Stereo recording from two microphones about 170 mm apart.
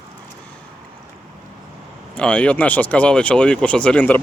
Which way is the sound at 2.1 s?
10° left (ahead or behind).